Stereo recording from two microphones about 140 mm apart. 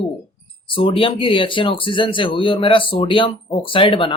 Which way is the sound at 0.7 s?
40° left (ahead or behind).